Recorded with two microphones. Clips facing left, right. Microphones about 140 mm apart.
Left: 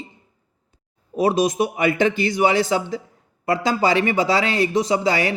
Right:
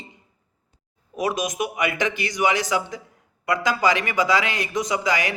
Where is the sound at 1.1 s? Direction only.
30° left (ahead or behind).